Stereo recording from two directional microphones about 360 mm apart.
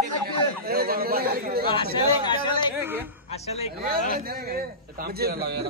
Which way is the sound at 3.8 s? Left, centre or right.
Right.